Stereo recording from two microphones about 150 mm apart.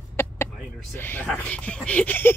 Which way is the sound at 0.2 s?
20° left (ahead or behind).